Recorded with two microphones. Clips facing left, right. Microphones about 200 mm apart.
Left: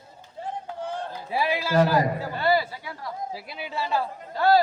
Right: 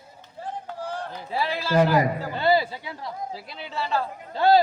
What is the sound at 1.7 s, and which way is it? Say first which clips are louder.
A man's voice: right 2 dB; 15° right (ahead or behind).